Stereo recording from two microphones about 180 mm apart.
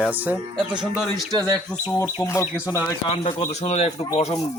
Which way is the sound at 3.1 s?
35° left (ahead or behind).